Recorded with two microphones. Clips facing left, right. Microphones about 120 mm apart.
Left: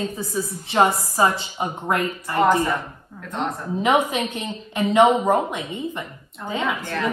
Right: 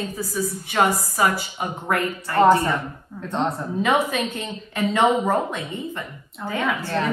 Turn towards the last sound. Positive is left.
turn(degrees=20)  # may be behind; listen again after turning